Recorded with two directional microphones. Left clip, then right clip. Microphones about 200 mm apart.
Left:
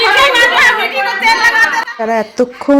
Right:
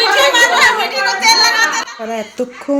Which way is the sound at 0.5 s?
55° right (ahead or behind).